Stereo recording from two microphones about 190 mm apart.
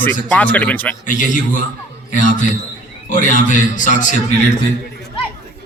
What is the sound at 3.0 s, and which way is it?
A man's voice, 40° left (ahead or behind).